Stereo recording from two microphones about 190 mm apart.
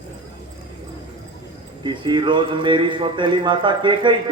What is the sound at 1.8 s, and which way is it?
Speech, 25° right (ahead or behind).